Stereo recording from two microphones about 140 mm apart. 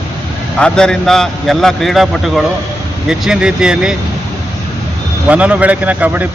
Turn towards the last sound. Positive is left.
turn(degrees=-10)  # may be behind; listen again after turning